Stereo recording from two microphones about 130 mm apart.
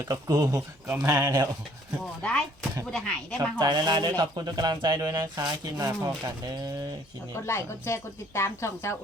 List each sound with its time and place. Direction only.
0.0 s speech: 25° right (ahead or behind)
2.2 s speech: 5° left (ahead or behind)
3.6 s speech: 35° right (ahead or behind)
7.4 s speech: 20° left (ahead or behind)